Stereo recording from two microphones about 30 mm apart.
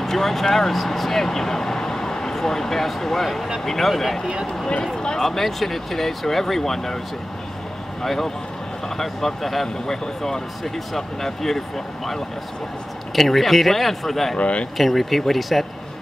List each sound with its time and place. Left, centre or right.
0.0 s speech: centre
4.9 s speech: left
5.2 s speech: centre
8.0 s speech: centre
14.4 s speech: left
14.8 s speech: centre